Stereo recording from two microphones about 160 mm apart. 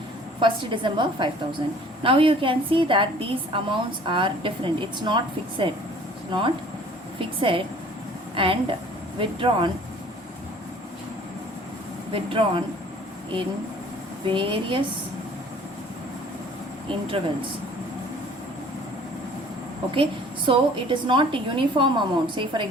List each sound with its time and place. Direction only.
0.3 s a woman's voice: 30° right (ahead or behind)
12.1 s a woman's voice: 35° right (ahead or behind)
14.3 s a woman's voice: 30° right (ahead or behind)
19.9 s a woman's voice: 30° right (ahead or behind)